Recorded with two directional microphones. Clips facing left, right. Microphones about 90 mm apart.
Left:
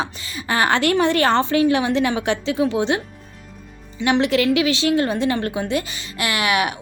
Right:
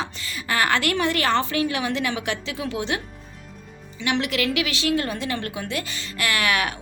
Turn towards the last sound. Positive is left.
turn(degrees=20)  # may be behind; listen again after turning